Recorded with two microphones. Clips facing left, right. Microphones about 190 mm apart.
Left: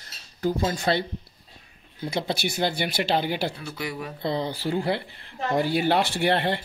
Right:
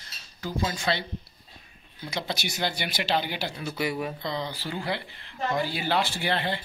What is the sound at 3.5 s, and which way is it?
Speech, 5° right (ahead or behind).